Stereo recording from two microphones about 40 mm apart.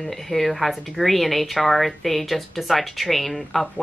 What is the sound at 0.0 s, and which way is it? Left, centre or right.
Speech, centre.